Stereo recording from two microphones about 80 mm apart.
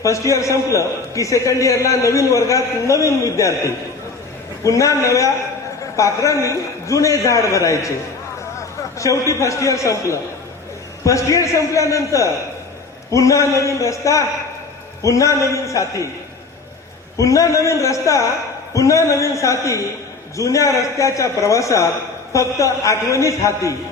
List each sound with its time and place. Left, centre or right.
0.0 s a man's voice: left
9.0 s a man's voice: left
17.2 s a man's voice: left